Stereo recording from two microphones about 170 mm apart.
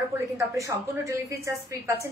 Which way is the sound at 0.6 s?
20° right (ahead or behind).